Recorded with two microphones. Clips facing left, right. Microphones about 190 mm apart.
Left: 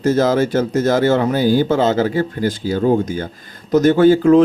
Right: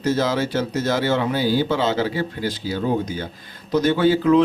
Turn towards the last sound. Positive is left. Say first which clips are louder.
# left 6 dB
turn(degrees=45)  # may be behind; listen again after turning